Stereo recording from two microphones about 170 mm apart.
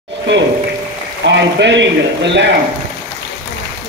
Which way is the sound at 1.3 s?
90° right.